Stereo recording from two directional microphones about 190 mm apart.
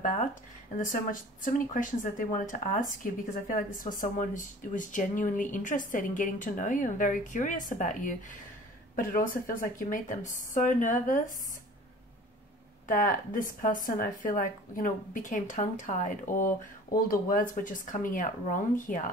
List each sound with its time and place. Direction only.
1.4 s speech: 45° left (ahead or behind)
12.8 s speech: 45° left (ahead or behind)